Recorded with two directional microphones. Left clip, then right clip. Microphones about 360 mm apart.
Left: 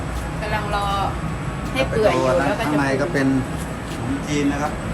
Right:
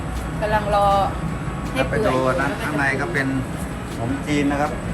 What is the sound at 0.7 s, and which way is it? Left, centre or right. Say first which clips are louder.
Speech: right 6 dB; centre.